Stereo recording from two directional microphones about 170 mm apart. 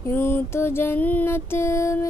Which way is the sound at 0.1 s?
15° left (ahead or behind).